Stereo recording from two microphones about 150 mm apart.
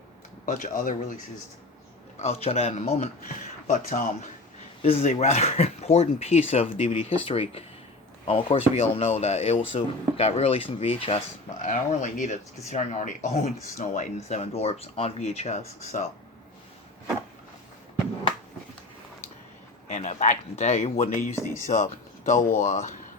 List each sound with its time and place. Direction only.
0.4 s speech: 60° left (ahead or behind)
2.2 s speech: 45° left (ahead or behind)
3.7 s speech: 65° left (ahead or behind)
4.8 s speech: 45° left (ahead or behind)
11.6 s speech: 60° left (ahead or behind)
19.9 s a sound: 55° left (ahead or behind)
20.6 s speech: 50° left (ahead or behind)
22.3 s speech: 55° left (ahead or behind)